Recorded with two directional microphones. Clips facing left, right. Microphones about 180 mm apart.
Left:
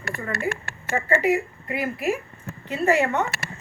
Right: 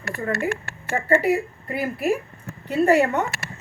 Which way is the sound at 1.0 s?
40° right (ahead or behind).